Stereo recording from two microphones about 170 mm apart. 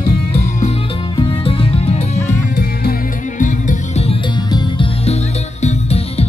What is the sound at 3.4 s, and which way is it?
Music, 50° left (ahead or behind).